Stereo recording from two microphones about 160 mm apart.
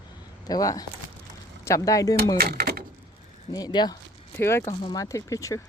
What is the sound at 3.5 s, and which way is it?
Speech, 25° left (ahead or behind).